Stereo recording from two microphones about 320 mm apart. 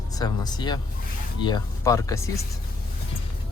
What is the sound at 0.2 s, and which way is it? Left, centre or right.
Speech, centre.